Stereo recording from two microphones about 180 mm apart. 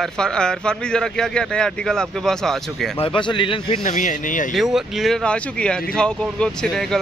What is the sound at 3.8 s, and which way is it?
Speech, 45° left (ahead or behind).